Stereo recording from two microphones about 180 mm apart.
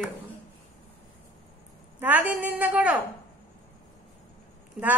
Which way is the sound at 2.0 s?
10° right (ahead or behind).